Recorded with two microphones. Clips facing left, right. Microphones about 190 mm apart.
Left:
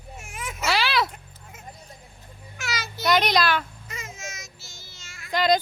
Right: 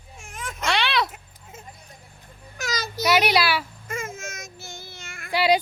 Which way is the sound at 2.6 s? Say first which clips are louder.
Right 3 dB; 40° right (ahead or behind).